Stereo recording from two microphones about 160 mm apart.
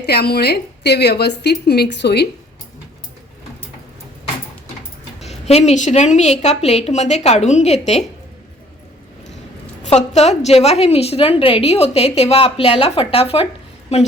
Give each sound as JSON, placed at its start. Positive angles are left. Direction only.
{"t": 0.0, "sound": "a woman's voice", "side_deg": 80}
{"t": 5.3, "sound": "a woman's voice", "side_deg": 40}
{"t": 9.8, "sound": "a woman's voice", "side_deg": 45}